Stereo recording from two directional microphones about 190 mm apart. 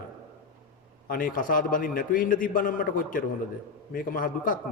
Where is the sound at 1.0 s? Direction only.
45° left (ahead or behind).